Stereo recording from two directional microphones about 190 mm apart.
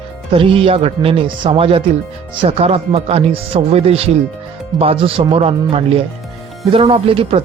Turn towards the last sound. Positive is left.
turn(degrees=-30)  # may be behind; listen again after turning